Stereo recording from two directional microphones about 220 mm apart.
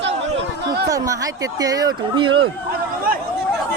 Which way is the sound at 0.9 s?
15° right (ahead or behind).